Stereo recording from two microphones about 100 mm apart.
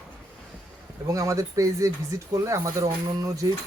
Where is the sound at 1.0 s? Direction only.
35° right (ahead or behind).